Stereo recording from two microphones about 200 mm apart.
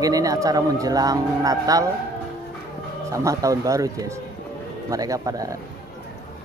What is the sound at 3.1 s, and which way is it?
Speech, 15° right (ahead or behind).